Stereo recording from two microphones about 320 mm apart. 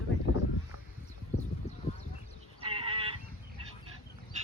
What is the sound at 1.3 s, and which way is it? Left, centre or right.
Clip-clop, left.